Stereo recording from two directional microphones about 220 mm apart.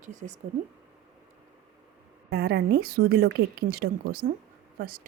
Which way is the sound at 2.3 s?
45° right (ahead or behind).